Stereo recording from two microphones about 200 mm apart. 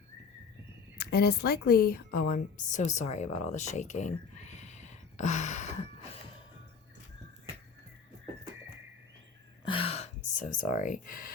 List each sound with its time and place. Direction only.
0.9 s a woman's voice: 55° left (ahead or behind); by 5.7 s 35° left (ahead or behind)
9.6 s a sound: 25° left (ahead or behind)
10.4 s speech: 40° left (ahead or behind)